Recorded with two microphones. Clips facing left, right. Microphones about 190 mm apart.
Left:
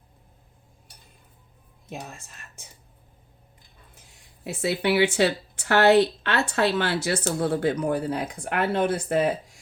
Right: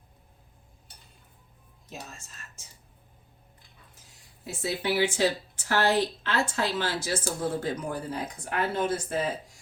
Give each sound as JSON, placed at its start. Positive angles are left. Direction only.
{"t": 1.9, "sound": "speech", "side_deg": 55}
{"t": 4.4, "sound": "speech", "side_deg": 65}